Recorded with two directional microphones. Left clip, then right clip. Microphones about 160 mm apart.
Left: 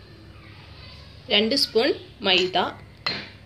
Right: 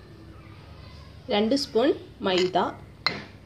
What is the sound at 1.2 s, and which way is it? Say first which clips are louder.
A woman's voice: left 4 dB; 40° right (ahead or behind).